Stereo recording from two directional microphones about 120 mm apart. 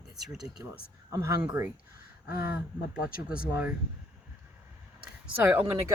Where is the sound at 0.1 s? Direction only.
5° right (ahead or behind).